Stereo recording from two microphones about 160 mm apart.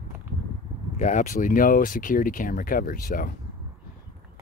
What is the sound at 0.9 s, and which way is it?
Speech, 50° left (ahead or behind).